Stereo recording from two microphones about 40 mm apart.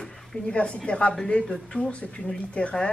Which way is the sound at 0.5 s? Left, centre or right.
Left.